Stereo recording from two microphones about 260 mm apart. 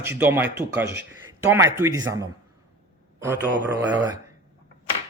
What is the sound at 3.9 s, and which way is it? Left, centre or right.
Speech, centre.